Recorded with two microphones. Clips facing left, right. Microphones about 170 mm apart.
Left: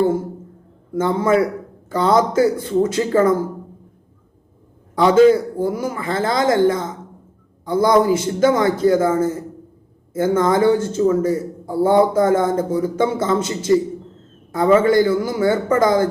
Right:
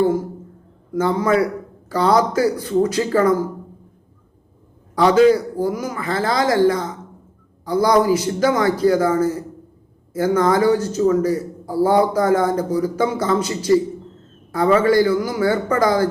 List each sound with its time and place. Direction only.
0.0 s a man's voice: 25° left (ahead or behind)
4.9 s a man's voice: 25° left (ahead or behind)